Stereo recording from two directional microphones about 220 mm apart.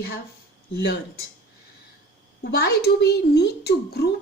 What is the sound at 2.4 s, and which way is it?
Speech, 50° left (ahead or behind).